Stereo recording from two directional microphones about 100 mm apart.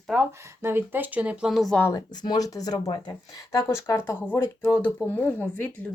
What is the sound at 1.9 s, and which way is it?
Speech, 40° left (ahead or behind).